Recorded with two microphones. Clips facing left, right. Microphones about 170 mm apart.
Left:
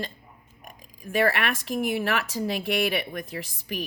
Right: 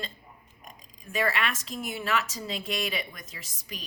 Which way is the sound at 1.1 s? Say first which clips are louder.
Left 5 dB; 55° left (ahead or behind).